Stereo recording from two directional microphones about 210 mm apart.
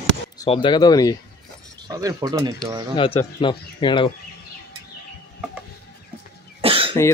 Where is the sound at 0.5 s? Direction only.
20° left (ahead or behind).